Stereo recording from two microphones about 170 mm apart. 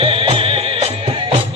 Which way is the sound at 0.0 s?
30° right (ahead or behind).